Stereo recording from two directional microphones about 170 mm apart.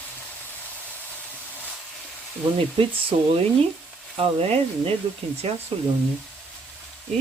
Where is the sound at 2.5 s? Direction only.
30° right (ahead or behind).